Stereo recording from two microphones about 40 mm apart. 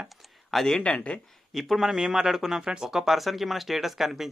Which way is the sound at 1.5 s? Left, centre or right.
Centre.